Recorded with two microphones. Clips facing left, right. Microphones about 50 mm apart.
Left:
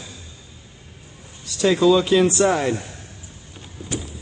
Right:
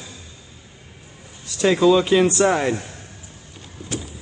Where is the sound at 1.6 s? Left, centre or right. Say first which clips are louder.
Even; centre.